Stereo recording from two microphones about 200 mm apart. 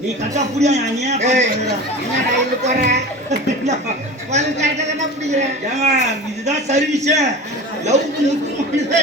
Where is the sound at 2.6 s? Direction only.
35° right (ahead or behind).